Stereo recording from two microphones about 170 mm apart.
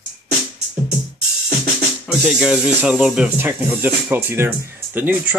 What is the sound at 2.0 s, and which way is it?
Speech, 5° right (ahead or behind).